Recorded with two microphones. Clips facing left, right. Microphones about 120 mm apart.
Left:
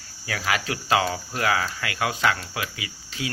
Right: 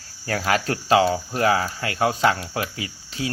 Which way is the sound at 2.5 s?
35° right (ahead or behind).